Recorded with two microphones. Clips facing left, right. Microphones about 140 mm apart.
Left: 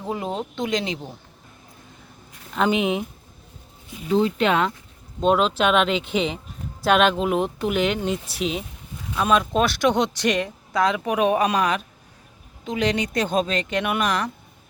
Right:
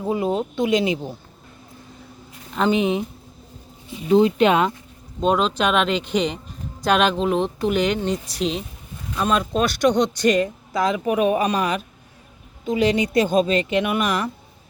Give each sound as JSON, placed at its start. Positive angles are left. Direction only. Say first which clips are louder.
{"t": 0.0, "sound": "speech", "louder": "right 5 dB", "side_deg": -5}
{"t": 2.6, "sound": "speech", "louder": "right 2 dB", "side_deg": 5}
{"t": 4.1, "sound": "speech", "louder": "right 4 dB", "side_deg": -20}
{"t": 5.2, "sound": "speech", "louder": "even", "side_deg": 0}